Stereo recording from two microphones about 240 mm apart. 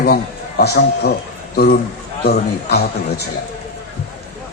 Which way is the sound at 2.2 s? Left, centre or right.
Left.